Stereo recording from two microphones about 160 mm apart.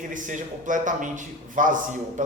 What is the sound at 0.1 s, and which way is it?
A man's voice, 55° right (ahead or behind).